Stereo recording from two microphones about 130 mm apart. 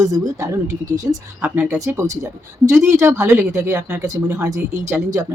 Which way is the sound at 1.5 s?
15° right (ahead or behind).